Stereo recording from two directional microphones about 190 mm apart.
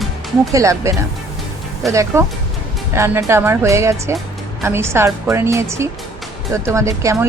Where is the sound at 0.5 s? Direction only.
15° right (ahead or behind).